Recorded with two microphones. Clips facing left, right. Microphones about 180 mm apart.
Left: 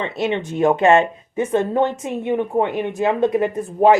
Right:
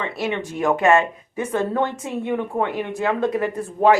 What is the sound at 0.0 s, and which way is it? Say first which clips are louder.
Speech: left 3 dB; 25° left (ahead or behind).